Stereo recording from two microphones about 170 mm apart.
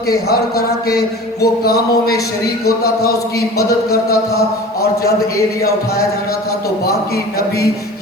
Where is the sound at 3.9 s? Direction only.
65° left (ahead or behind).